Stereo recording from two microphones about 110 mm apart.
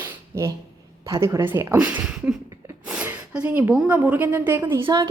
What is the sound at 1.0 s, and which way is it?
A woman's voice, 25° right (ahead or behind).